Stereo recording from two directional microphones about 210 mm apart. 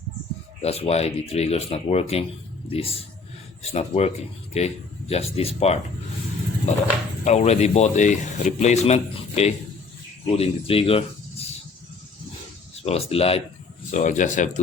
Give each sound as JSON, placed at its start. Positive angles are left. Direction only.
{"t": 0.6, "sound": "speech", "side_deg": 30}
{"t": 7.3, "sound": "speech", "side_deg": 30}
{"t": 12.7, "sound": "speech", "side_deg": 30}
{"t": 13.9, "sound": "speech", "side_deg": 35}